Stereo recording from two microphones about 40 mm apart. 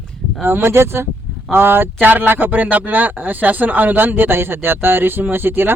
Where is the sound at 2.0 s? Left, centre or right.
Right.